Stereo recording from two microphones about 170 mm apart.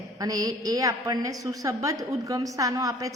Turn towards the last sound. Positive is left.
turn(degrees=-20)  # may be behind; listen again after turning